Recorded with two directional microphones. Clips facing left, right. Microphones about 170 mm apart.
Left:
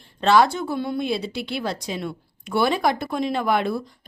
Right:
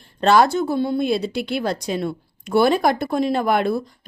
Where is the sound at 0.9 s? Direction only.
45° right (ahead or behind).